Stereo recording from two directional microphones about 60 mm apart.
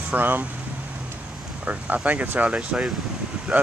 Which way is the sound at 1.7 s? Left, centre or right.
Right.